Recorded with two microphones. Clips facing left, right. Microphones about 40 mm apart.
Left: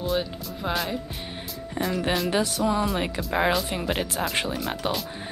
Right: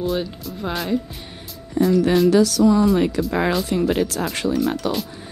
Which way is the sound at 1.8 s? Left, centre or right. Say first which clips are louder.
Right 9 dB; left.